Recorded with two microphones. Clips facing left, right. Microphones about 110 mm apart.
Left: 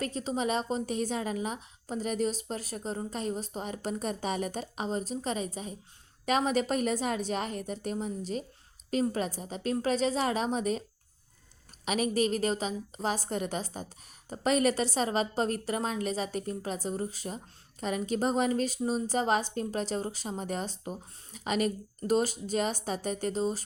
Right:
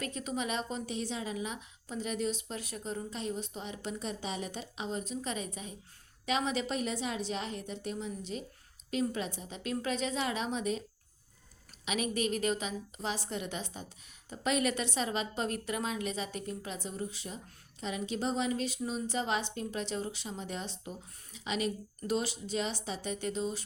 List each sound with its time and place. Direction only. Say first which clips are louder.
0.0 s a woman's voice: left 5 dB; 35° left (ahead or behind)
11.9 s a woman's voice: left 5 dB; 40° left (ahead or behind)